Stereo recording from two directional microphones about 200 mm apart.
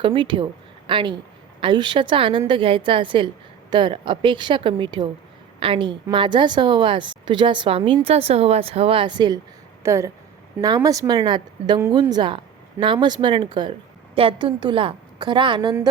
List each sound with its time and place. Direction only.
0.0 s a woman's voice: 25° right (ahead or behind)